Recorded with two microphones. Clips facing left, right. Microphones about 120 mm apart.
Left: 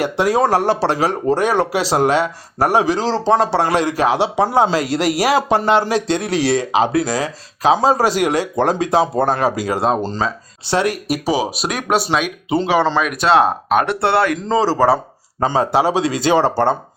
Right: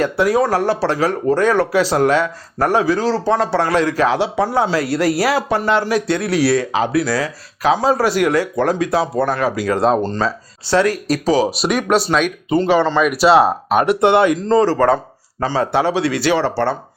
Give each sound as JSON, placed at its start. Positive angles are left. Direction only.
{"t": 0.0, "sound": "speech", "side_deg": 25}
{"t": 9.7, "sound": "a man's voice", "side_deg": 5}
{"t": 10.7, "sound": "speech", "side_deg": 20}
{"t": 11.6, "sound": "a man's voice", "side_deg": 0}
{"t": 13.0, "sound": "speech", "side_deg": -5}
{"t": 14.4, "sound": "a man's voice", "side_deg": 5}
{"t": 15.4, "sound": "speech", "side_deg": 20}
{"t": 16.4, "sound": "speech", "side_deg": 45}